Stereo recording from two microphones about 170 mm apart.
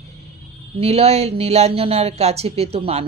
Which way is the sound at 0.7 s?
35° right (ahead or behind).